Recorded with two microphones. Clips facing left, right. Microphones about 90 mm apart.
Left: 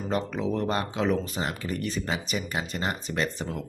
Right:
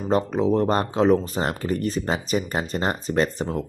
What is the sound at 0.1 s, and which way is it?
Speech, 35° right (ahead or behind).